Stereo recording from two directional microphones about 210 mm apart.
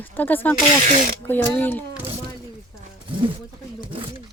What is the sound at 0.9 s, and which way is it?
Speech, 40° right (ahead or behind).